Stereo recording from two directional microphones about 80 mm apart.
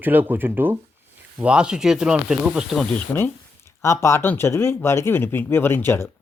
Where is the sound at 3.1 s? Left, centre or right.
Left.